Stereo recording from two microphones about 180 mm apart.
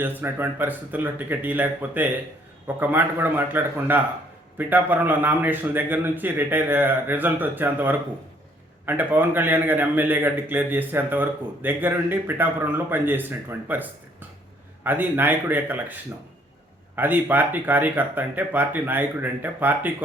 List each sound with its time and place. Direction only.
0.0 s a man's voice: 10° right (ahead or behind)